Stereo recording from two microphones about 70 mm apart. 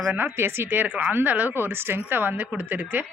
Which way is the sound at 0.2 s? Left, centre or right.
Right.